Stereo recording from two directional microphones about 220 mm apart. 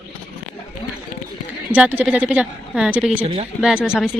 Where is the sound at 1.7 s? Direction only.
5° right (ahead or behind).